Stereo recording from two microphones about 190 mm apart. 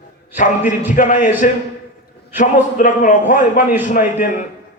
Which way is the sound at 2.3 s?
45° left (ahead or behind).